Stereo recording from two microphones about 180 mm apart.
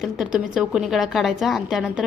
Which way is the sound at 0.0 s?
5° right (ahead or behind).